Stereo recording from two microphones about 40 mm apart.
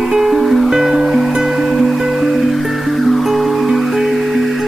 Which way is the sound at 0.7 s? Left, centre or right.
Centre.